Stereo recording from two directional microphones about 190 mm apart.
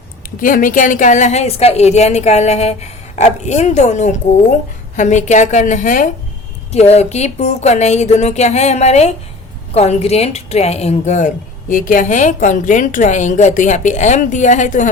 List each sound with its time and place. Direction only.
0.4 s a woman's voice: 45° left (ahead or behind)